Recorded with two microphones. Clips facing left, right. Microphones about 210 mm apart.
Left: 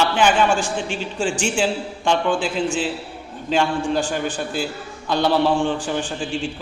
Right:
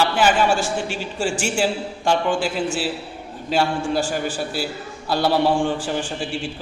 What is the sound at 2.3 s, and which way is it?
Speech, 45° right (ahead or behind).